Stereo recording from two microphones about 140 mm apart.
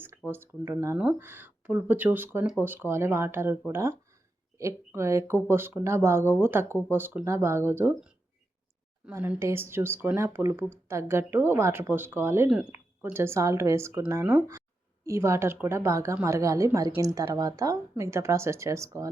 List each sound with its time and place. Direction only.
0.3 s speech: 15° right (ahead or behind)
6.7 s speech: 15° left (ahead or behind)
6.9 s speech: 10° right (ahead or behind)